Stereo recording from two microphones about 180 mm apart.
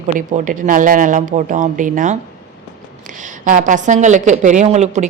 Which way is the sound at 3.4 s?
45° right (ahead or behind).